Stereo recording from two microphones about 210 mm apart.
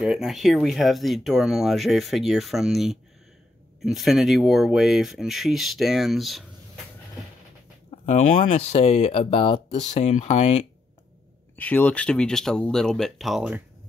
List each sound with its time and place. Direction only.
0.0 s speech: centre (ahead or behind)
8.5 s speech: 30° left (ahead or behind)
11.5 s speech: 10° left (ahead or behind)